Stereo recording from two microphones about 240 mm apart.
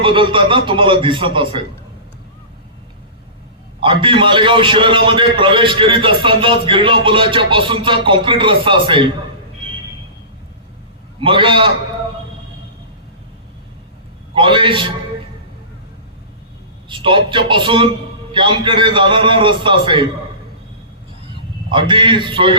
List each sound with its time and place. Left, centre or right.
0.0 s a man's voice: right
3.8 s a man's voice: right
11.2 s a man's voice: right
14.3 s a man's voice: right
16.9 s a man's voice: right
21.7 s a man's voice: centre